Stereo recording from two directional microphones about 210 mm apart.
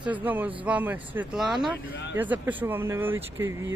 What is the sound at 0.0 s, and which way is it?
Speech, 10° right (ahead or behind).